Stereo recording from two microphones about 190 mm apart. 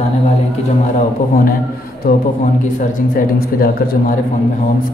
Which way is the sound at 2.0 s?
45° left (ahead or behind).